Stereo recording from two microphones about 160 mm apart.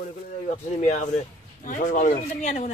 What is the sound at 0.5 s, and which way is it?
Speech, 45° left (ahead or behind).